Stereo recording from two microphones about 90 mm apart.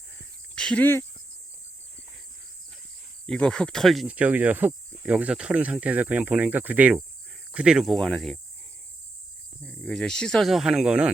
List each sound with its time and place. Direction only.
0.5 s cricket: 10° left (ahead or behind)
0.8 s speech: 25° left (ahead or behind)
3.2 s speech: 10° left (ahead or behind)
4.0 s speech: 15° right (ahead or behind)
5.1 s speech: 10° right (ahead or behind)
7.9 s speech: centre (ahead or behind)
9.6 s speech: 5° left (ahead or behind); by 11.1 s 10° right (ahead or behind)